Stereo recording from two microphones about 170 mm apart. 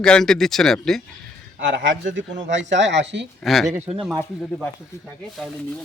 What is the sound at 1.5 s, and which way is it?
Speech, 90° right.